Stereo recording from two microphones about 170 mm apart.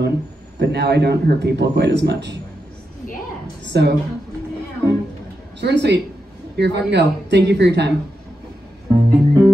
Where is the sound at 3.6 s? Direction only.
85° right.